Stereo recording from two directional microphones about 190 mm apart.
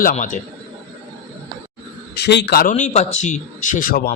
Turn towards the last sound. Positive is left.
turn(degrees=50)  # may be behind; listen again after turning